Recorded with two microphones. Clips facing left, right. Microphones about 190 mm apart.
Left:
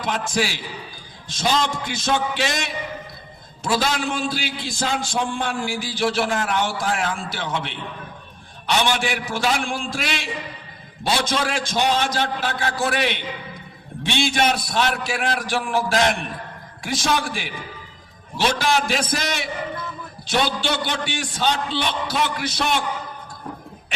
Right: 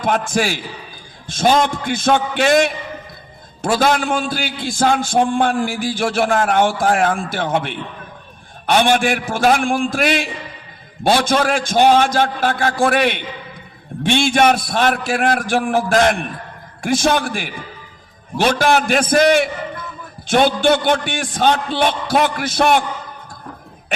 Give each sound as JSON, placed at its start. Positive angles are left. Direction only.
{"t": 0.0, "sound": "a man's voice", "side_deg": -50}